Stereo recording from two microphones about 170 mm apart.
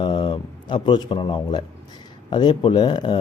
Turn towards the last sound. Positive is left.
turn(degrees=30)  # may be behind; listen again after turning